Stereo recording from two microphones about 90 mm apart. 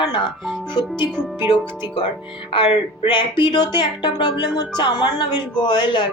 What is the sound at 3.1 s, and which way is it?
A woman's voice, 60° left (ahead or behind).